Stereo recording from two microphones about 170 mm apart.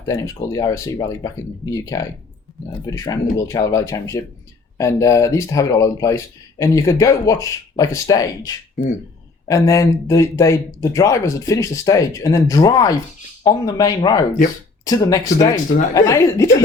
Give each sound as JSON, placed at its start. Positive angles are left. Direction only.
{"t": 0.0, "sound": "speech", "side_deg": 20}